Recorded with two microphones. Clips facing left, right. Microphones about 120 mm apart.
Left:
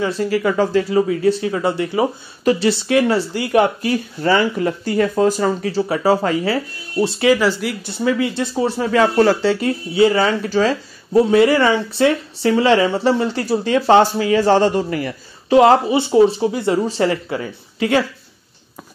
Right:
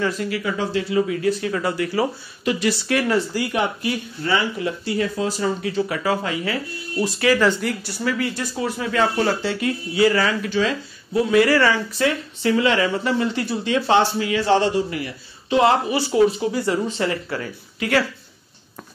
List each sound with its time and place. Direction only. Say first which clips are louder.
0.0 s speech: left 5 dB; 30° left (ahead or behind)
0.4 s speech: left 10 dB; 50° left (ahead or behind); by 3.2 s 25° left (ahead or behind)
4.2 s speech: left 6 dB; 45° left (ahead or behind); by 7.3 s 25° left (ahead or behind)
7.3 s speech: left 1 dB; 5° left (ahead or behind)
7.8 s speech: left 5 dB; 20° left (ahead or behind)
9.0 s speech: left 6 dB; 50° left (ahead or behind)
9.4 s speech: left 6 dB; 35° left (ahead or behind)
15.9 s speech: left 4 dB; 20° left (ahead or behind)
17.3 s speech: left 4 dB; 20° left (ahead or behind)